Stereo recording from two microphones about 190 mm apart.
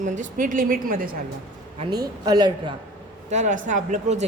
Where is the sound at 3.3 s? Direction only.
40° right (ahead or behind).